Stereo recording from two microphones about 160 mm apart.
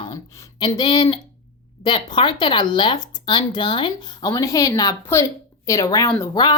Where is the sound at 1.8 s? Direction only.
30° left (ahead or behind).